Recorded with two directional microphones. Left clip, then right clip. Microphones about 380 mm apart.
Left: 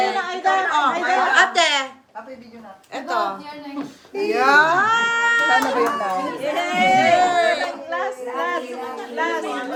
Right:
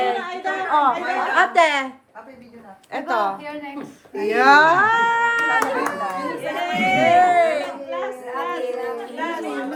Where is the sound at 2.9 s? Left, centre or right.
Right.